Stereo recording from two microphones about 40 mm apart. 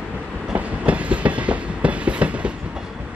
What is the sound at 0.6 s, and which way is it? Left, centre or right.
Train, right.